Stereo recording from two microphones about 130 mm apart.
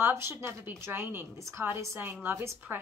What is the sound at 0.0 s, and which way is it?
A woman's voice, 20° right (ahead or behind).